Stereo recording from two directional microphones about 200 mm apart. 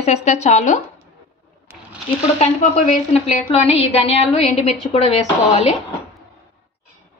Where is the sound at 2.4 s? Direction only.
35° left (ahead or behind).